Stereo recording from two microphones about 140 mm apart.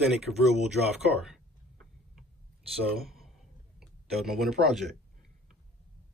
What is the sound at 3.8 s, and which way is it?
Speech, centre (ahead or behind).